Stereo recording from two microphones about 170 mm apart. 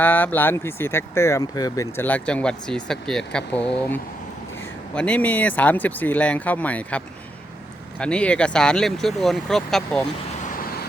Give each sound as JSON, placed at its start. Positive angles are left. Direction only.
{"t": 0.0, "sound": "speech", "side_deg": 10}
{"t": 10.4, "sound": "vehicle", "side_deg": 55}